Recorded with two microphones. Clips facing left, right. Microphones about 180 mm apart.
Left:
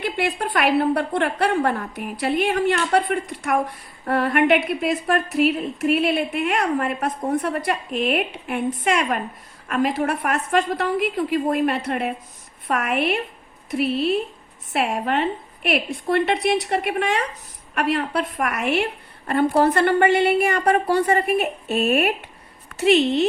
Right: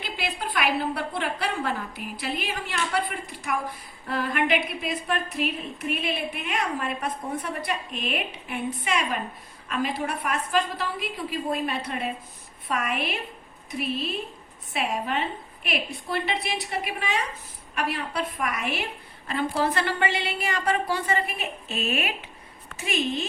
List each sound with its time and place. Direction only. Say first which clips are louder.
0.0 s a woman's voice: left 8 dB; 70° left (ahead or behind)
19.3 s a woman's voice: left 8 dB; 55° left (ahead or behind)
22.8 s a woman's voice: left 11 dB; 75° left (ahead or behind)